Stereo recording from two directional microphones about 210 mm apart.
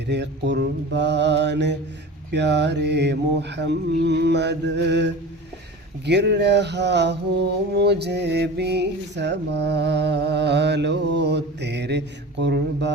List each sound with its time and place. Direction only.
0.1 s mantra: 55° right (ahead or behind)